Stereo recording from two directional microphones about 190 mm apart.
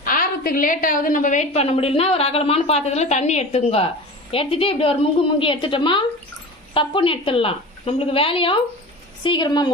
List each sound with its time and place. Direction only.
0.0 s a woman's voice: 50° left (ahead or behind); by 9.7 s 25° left (ahead or behind)